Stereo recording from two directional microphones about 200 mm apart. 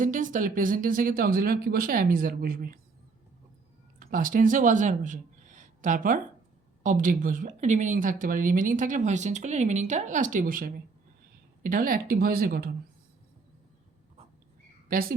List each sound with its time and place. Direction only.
0.0 s speech: 40° right (ahead or behind)
4.0 s speech: 45° right (ahead or behind)
14.9 s speech: 45° right (ahead or behind)